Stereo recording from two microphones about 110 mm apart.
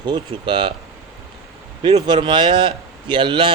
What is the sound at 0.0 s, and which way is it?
Speech, 45° right (ahead or behind).